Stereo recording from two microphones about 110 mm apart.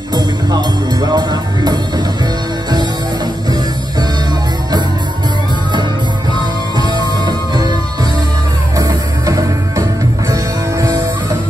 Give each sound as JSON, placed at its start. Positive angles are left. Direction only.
{"t": 0.1, "sound": "speech", "side_deg": -40}
{"t": 6.8, "sound": "music", "side_deg": -40}
{"t": 8.7, "sound": "music", "side_deg": -30}